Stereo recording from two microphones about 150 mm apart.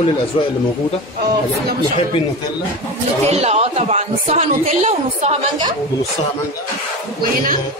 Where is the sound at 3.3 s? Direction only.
45° right (ahead or behind).